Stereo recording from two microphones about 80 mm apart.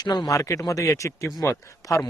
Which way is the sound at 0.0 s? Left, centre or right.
Left.